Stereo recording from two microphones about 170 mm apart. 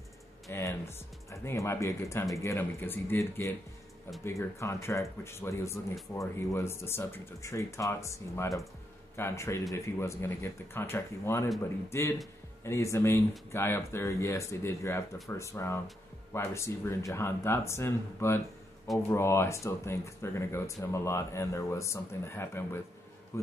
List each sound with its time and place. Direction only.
0.5 s speech: 15° left (ahead or behind)